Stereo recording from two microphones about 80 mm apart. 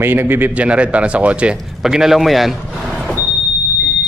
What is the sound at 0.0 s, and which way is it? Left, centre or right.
A man's voice, right.